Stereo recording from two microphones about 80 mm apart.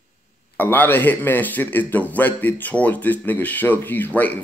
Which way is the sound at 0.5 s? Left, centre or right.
Left.